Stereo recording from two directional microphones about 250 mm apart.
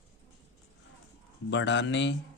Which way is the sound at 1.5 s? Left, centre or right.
Left.